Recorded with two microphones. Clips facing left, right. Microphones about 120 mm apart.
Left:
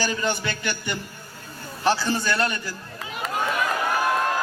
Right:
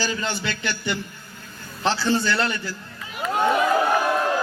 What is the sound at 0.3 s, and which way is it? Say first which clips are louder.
Speech: left 2 dB; 20° left (ahead or behind).